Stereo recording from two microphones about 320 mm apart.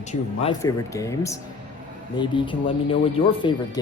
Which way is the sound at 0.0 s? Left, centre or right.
Left.